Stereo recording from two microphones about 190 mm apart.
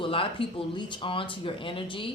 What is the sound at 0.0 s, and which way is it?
A woman's voice, 25° left (ahead or behind).